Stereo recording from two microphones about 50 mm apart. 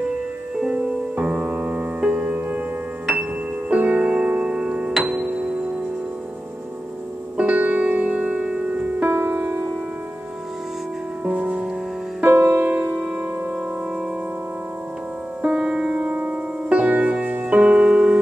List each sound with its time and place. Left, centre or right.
0.7 s music: right
7.3 s music: right
9.0 s music: right
11.2 s music: right
12.2 s music: right
15.4 s music: centre